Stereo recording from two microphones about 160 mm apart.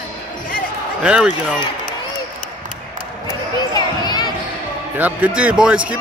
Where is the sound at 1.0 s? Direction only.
5° right (ahead or behind).